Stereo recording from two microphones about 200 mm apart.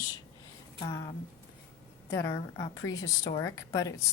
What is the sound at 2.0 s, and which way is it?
A woman's voice, 15° left (ahead or behind).